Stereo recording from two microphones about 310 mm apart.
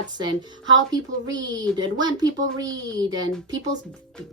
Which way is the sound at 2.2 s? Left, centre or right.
Right.